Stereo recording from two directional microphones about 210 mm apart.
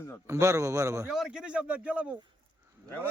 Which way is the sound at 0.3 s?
15° right (ahead or behind).